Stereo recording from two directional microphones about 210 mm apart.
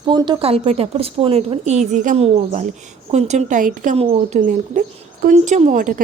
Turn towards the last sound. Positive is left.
turn(degrees=-40)  # may be behind; listen again after turning